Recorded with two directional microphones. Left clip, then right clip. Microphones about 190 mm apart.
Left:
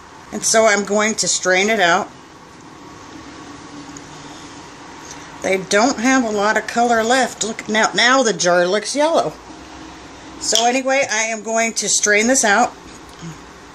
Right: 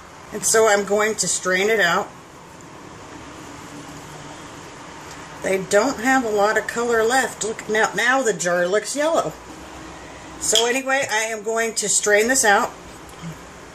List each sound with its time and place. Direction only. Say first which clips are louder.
0.5 s speech: left 2 dB; 45° left (ahead or behind)
5.4 s speech: left 3 dB; 40° left (ahead or behind)
10.5 s speech: left 3 dB; 30° left (ahead or behind)